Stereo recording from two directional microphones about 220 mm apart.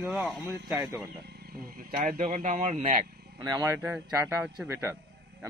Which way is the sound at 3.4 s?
15° right (ahead or behind).